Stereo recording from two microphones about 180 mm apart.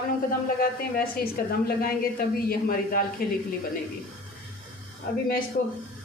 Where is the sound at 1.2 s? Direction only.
55° left (ahead or behind).